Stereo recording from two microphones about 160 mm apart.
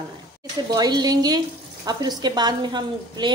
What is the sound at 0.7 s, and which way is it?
Speech, 25° right (ahead or behind).